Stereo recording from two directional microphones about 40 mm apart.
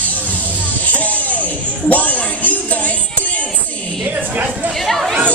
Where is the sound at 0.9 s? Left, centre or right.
Left.